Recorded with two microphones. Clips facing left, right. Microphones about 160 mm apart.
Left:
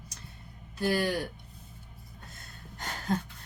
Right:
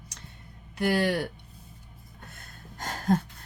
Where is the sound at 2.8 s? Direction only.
45° right (ahead or behind).